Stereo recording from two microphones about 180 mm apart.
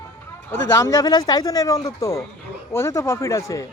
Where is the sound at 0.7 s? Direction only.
20° left (ahead or behind).